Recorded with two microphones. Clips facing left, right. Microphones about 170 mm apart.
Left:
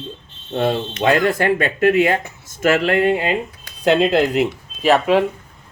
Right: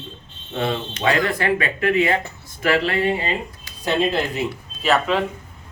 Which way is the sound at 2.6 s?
50° left (ahead or behind).